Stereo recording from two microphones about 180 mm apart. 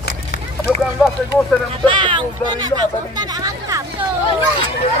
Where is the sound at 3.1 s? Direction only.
20° right (ahead or behind).